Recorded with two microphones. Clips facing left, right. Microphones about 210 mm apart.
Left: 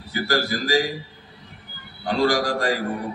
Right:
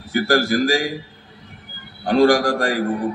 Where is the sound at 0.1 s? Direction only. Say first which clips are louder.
Right 6 dB; 50° right (ahead or behind).